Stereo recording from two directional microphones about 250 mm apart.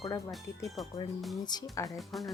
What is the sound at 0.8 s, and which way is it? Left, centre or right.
Speech, centre.